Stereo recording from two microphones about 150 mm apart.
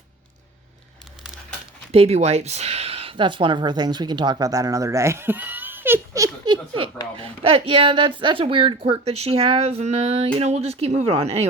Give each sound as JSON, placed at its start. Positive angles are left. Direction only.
{"t": 1.9, "sound": "speech", "side_deg": -45}